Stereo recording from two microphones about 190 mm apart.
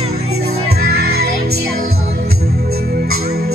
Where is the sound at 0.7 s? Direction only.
55° right (ahead or behind).